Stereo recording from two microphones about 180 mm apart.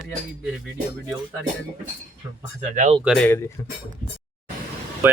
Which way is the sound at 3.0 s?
5° left (ahead or behind).